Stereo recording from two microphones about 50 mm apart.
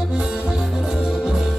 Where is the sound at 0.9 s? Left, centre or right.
Centre.